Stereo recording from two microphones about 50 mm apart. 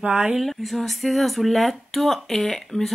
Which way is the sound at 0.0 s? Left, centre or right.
Right.